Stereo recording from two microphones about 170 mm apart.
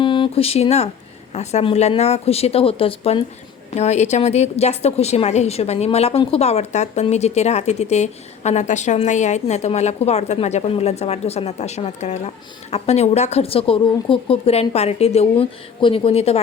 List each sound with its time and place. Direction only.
0.0 s a woman's voice: 30° left (ahead or behind)